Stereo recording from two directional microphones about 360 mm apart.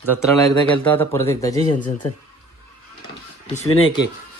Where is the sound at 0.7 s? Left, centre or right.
Centre.